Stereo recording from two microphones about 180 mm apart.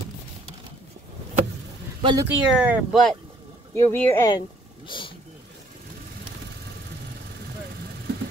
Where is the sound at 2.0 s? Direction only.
25° right (ahead or behind).